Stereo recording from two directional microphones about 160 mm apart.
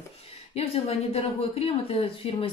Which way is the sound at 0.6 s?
40° left (ahead or behind).